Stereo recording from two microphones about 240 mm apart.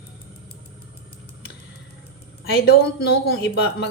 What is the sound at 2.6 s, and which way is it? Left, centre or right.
Speech, left.